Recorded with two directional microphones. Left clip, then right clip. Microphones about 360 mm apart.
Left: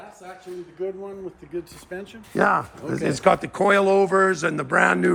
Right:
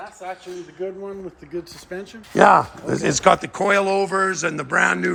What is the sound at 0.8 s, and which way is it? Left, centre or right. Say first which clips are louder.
Speech: right 1 dB; right.